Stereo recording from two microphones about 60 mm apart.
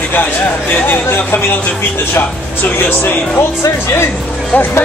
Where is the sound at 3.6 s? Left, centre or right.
Left.